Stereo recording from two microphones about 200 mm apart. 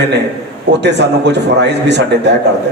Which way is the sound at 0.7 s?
60° right (ahead or behind).